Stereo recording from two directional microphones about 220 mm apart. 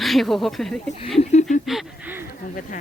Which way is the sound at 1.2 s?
30° left (ahead or behind).